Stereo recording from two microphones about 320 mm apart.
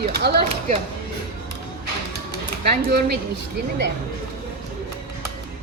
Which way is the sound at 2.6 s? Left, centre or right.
Right.